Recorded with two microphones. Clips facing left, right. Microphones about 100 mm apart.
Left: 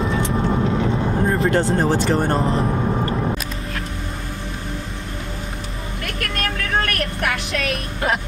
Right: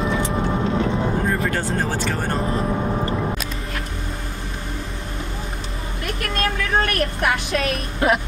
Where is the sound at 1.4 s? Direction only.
25° left (ahead or behind).